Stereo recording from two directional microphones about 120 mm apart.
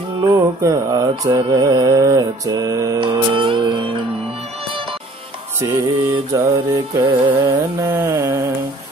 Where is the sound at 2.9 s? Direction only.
45° right (ahead or behind).